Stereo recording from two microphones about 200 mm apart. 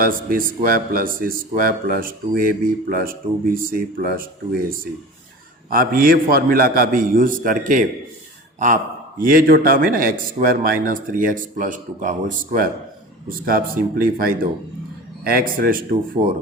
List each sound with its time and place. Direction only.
0.0 s speech: 45° right (ahead or behind)
5.7 s speech: 45° right (ahead or behind)